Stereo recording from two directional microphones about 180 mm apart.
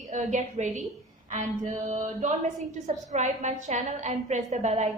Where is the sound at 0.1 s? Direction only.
40° right (ahead or behind).